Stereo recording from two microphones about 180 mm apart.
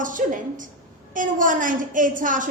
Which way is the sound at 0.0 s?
45° right (ahead or behind).